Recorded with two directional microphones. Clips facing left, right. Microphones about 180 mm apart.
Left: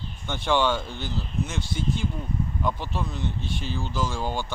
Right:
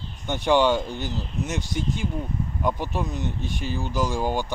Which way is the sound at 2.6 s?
15° right (ahead or behind).